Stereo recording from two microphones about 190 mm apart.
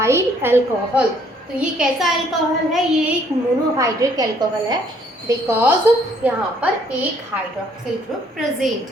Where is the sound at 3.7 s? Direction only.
15° right (ahead or behind).